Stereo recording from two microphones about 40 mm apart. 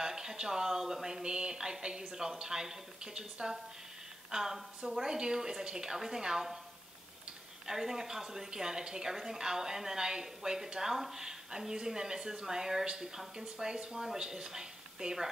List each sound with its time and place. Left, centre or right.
0.0 s a woman's voice: centre
7.6 s a woman's voice: centre